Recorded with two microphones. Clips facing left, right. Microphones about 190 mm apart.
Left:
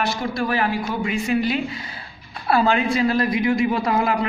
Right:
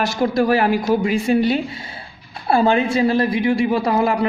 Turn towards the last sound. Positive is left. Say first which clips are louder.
# right 3 dB
turn(degrees=-30)  # may be behind; listen again after turning